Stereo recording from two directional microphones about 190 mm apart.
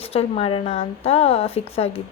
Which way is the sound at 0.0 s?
30° left (ahead or behind).